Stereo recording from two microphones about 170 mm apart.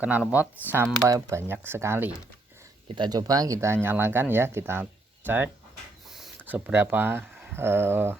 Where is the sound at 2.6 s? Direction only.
25° right (ahead or behind).